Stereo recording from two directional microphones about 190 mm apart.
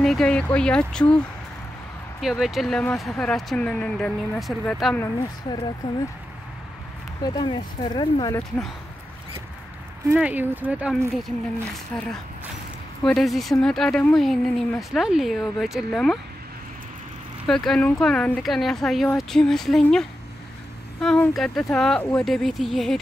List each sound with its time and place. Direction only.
0.0 s speech: 5° left (ahead or behind)
2.2 s speech: centre (ahead or behind)
4.9 s speech: 15° left (ahead or behind)
7.2 s speech: 20° left (ahead or behind)
10.1 s speech: 10° right (ahead or behind)
11.9 s speech: 5° left (ahead or behind)
17.5 s speech: centre (ahead or behind)